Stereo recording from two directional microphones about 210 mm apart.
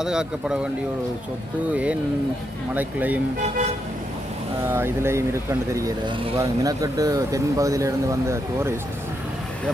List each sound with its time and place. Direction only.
0.0 s speech: 5° right (ahead or behind)
2.7 s speech: 5° right (ahead or behind)
4.6 s speech: 10° right (ahead or behind)